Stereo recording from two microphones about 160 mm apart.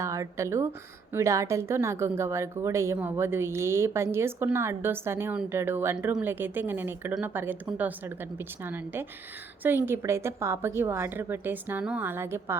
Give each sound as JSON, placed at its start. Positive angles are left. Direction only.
{"t": 0.0, "sound": "a woman's voice", "side_deg": -20}